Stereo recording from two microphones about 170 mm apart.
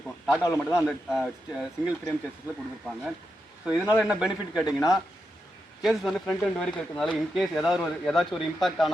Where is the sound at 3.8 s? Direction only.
5° right (ahead or behind).